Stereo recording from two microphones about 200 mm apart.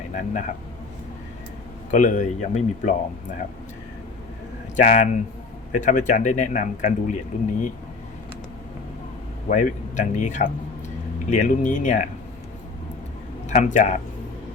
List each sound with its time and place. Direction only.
0.1 s speech: 40° left (ahead or behind)
1.9 s speech: 40° left (ahead or behind)
4.8 s speech: 35° left (ahead or behind)
9.5 s speech: 40° left (ahead or behind)
13.5 s speech: 40° left (ahead or behind)